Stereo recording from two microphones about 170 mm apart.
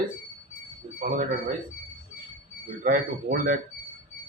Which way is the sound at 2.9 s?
55° right (ahead or behind).